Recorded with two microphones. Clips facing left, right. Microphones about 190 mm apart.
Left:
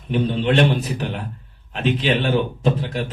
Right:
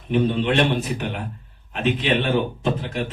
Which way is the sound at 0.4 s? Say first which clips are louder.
Left 2 dB; 35° left (ahead or behind).